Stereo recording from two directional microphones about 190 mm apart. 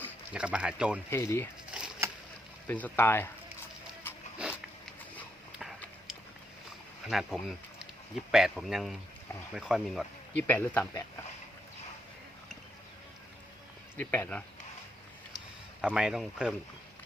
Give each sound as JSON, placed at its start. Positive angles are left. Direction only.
{"t": 0.3, "sound": "speech", "side_deg": -5}
{"t": 1.1, "sound": "speech", "side_deg": 15}
{"t": 1.7, "sound": "a sound", "side_deg": -5}
{"t": 2.6, "sound": "speech", "side_deg": 10}
{"t": 4.4, "sound": "a sound", "side_deg": -5}
{"t": 5.5, "sound": "horse", "side_deg": 0}
{"t": 7.1, "sound": "speech", "side_deg": 0}
{"t": 10.3, "sound": "speech", "side_deg": 10}
{"t": 13.9, "sound": "speech", "side_deg": 10}
{"t": 15.8, "sound": "speech", "side_deg": -5}